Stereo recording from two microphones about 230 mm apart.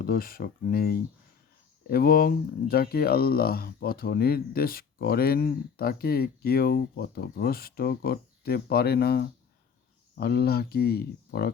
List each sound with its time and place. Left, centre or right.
0.0 s speech: left